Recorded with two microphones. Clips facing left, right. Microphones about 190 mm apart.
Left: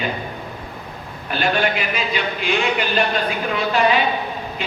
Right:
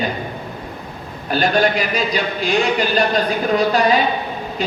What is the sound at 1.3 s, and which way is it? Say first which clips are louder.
Speech: right 4 dB; 40° right (ahead or behind).